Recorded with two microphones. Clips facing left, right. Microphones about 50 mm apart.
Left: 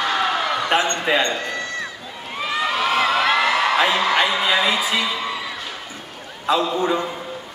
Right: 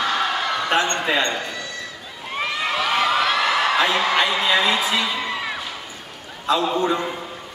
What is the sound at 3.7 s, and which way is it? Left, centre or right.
A man's voice, centre.